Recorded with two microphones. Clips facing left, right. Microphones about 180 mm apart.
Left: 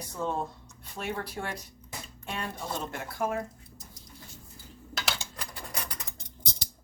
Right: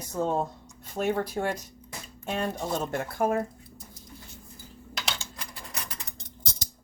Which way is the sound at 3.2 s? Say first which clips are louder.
Right 5 dB; 50° right (ahead or behind).